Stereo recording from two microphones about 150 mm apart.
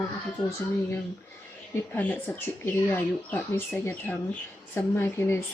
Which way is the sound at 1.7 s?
10° left (ahead or behind).